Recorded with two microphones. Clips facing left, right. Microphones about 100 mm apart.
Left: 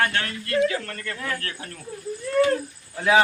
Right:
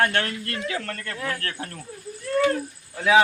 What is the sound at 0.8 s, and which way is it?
Speech, 65° right (ahead or behind).